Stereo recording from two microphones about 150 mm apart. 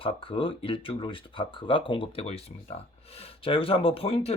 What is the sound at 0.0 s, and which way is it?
Speech, 35° left (ahead or behind).